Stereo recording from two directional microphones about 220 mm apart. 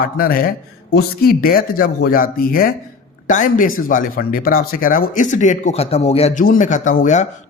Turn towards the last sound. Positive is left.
turn(degrees=35)  # may be behind; listen again after turning